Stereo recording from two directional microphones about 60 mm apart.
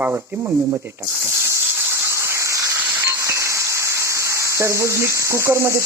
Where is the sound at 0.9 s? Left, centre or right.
Right.